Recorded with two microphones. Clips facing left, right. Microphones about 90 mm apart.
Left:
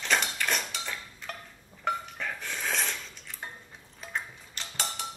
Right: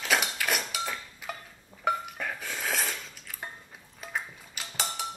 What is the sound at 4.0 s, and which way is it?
Cutlery, 5° right (ahead or behind).